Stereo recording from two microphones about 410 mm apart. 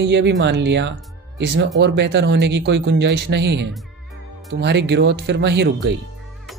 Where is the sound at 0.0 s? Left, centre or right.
Right.